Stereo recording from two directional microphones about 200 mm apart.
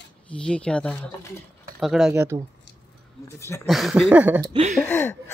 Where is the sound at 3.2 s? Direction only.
15° left (ahead or behind).